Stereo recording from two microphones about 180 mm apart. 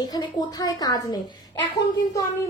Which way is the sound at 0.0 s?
20° left (ahead or behind).